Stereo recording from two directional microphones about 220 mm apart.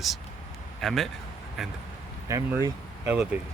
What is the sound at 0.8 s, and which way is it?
Speech, centre (ahead or behind).